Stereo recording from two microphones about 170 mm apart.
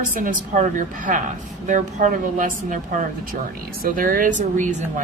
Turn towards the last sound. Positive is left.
turn(degrees=-50)  # may be behind; listen again after turning